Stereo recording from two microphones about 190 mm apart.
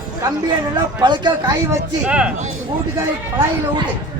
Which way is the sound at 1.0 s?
25° right (ahead or behind).